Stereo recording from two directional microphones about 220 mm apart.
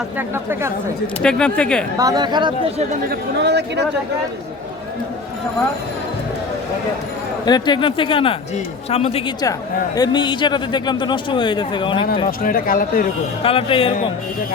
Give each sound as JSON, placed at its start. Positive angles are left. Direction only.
{"t": 1.2, "sound": "speech", "side_deg": 5}
{"t": 2.0, "sound": "speech", "side_deg": -15}
{"t": 3.1, "sound": "speech", "side_deg": -50}
{"t": 7.4, "sound": "speech", "side_deg": 20}
{"t": 12.4, "sound": "speech", "side_deg": 40}
{"t": 13.4, "sound": "speech", "side_deg": 25}